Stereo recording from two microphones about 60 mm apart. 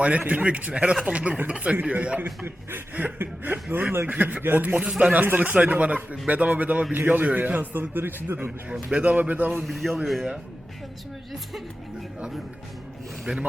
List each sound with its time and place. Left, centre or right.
0.2 s a man's voice: right
2.2 s a man's voice: right
9.0 s a man's voice: right
9.5 s a man's voice: centre
13.3 s a man's voice: right